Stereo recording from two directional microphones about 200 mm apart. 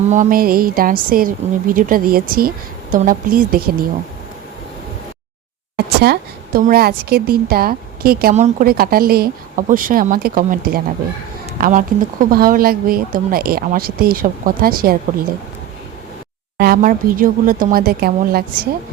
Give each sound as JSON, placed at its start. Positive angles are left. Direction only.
{"t": 0.1, "sound": "a woman's voice", "side_deg": -40}
{"t": 5.7, "sound": "a woman's voice", "side_deg": -55}
{"t": 16.6, "sound": "a woman's voice", "side_deg": -45}